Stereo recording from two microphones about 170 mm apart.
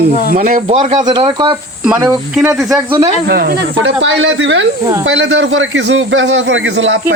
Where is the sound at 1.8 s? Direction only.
5° right (ahead or behind).